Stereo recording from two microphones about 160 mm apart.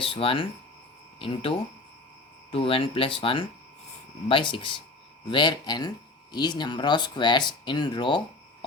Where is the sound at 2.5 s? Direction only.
35° left (ahead or behind).